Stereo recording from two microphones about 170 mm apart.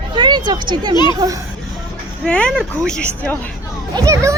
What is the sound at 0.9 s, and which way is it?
Speech, 25° left (ahead or behind).